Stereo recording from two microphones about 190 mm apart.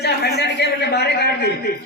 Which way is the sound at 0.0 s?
60° left (ahead or behind).